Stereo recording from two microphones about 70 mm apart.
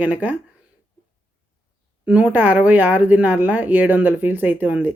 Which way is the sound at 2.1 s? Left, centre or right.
Centre.